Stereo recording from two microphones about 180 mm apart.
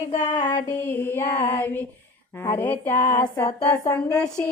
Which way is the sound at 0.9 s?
10° left (ahead or behind).